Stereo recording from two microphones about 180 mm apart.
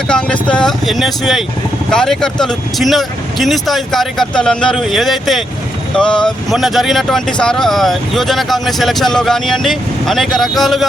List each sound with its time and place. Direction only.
0.1 s speech: 5° left (ahead or behind)